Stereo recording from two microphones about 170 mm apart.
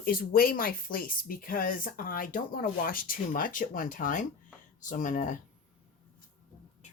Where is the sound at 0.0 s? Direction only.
60° left (ahead or behind).